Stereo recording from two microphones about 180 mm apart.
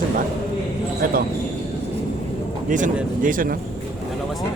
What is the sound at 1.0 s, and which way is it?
Speech, 50° right (ahead or behind).